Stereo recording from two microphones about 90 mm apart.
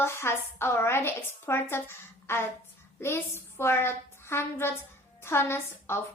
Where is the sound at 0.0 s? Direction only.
30° left (ahead or behind).